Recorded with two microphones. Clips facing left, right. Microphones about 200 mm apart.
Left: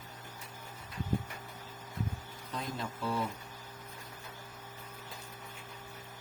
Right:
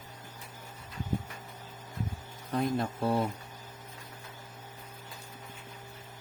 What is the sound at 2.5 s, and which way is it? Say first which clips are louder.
Speech: right 9 dB; 60° right (ahead or behind).